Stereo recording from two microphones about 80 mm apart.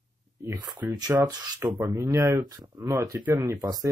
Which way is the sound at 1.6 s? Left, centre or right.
Right.